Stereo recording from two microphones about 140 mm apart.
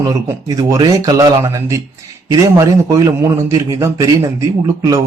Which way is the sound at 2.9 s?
25° right (ahead or behind).